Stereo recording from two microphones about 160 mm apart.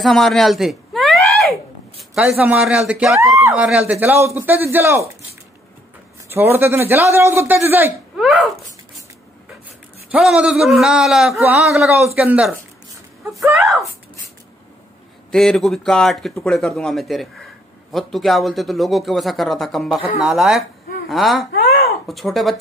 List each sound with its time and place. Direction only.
0.0 s a sound: centre (ahead or behind)
2.9 s a man's voice: 5° right (ahead or behind)
3.3 s a sound: 15° right (ahead or behind)
3.6 s speech: 10° right (ahead or behind)
6.3 s speech: 15° right (ahead or behind)
10.1 s a man's voice: 5° right (ahead or behind)
15.3 s a man's voice: centre (ahead or behind)